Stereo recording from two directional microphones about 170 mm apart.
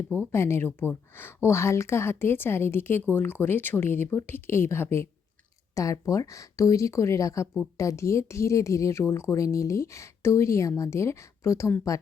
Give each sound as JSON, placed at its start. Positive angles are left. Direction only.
{"t": 0.3, "sound": "speech", "side_deg": 15}